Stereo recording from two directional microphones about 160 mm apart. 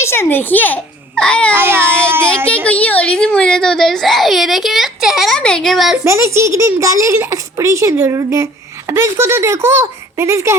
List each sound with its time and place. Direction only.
0.0 s a child's voice: 15° left (ahead or behind)
1.5 s a child's voice: 15° right (ahead or behind)
2.6 s a child's voice: 10° left (ahead or behind)
6.1 s a child's voice: 15° right (ahead or behind)